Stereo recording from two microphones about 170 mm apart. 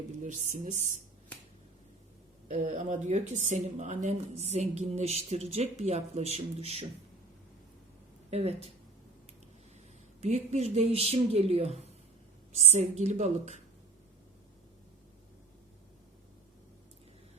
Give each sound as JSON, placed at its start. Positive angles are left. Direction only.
{"t": 0.2, "sound": "speech", "side_deg": -50}
{"t": 2.5, "sound": "a woman's voice", "side_deg": -45}
{"t": 8.3, "sound": "a woman's voice", "side_deg": -35}
{"t": 10.2, "sound": "a woman's voice", "side_deg": -40}